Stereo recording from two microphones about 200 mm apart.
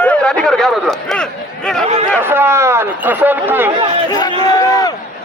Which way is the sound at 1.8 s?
30° right (ahead or behind).